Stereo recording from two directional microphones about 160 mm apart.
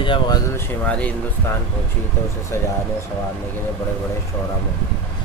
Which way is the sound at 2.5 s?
15° left (ahead or behind).